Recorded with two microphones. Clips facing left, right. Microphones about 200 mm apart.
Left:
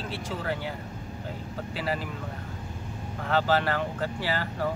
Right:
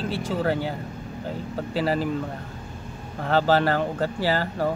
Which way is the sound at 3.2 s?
35° right (ahead or behind).